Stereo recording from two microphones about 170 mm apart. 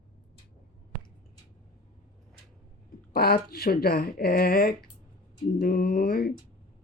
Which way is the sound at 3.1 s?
65° left (ahead or behind).